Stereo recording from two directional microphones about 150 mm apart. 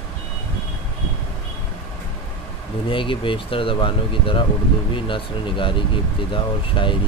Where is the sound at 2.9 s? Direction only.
35° left (ahead or behind).